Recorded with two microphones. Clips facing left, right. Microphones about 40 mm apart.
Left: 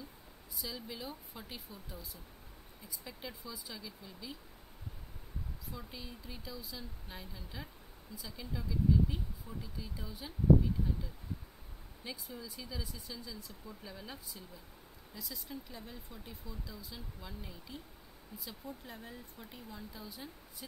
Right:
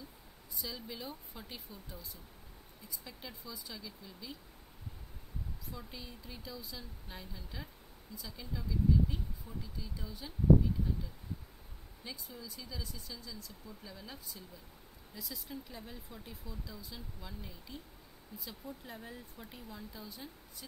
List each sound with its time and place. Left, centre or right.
0.6 s speech: centre
5.7 s speech: centre
12.0 s speech: centre
15.1 s speech: centre